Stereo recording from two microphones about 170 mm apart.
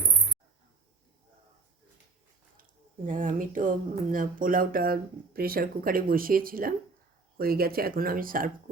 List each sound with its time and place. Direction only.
3.1 s speech: 50° right (ahead or behind)